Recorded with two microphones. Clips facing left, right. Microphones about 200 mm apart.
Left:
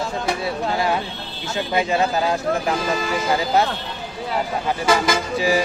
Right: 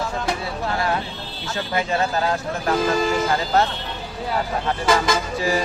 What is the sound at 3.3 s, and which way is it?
Speech, 15° left (ahead or behind).